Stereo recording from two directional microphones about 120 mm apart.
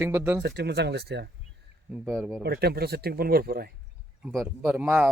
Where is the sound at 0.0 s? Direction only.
20° right (ahead or behind).